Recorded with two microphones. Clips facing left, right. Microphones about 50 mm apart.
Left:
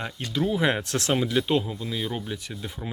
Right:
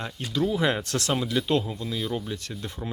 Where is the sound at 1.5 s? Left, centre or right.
Centre.